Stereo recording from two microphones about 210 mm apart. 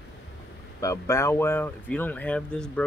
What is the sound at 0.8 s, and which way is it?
Speech, 15° left (ahead or behind).